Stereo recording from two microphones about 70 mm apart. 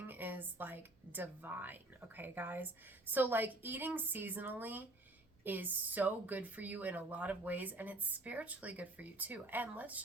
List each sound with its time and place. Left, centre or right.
0.0 s speech: right